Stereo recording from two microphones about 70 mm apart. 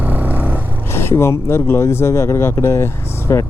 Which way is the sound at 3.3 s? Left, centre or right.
Left.